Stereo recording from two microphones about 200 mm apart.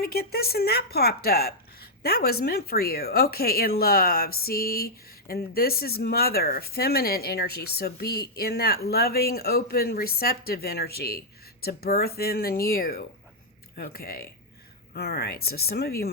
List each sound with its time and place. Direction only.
0.0 s speech: 50° left (ahead or behind)